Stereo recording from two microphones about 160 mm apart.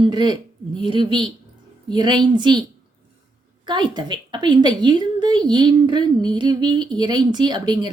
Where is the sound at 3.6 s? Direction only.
30° right (ahead or behind).